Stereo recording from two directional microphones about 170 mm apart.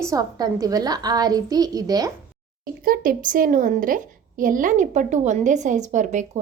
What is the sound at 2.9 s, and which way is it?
A woman's voice, 55° right (ahead or behind).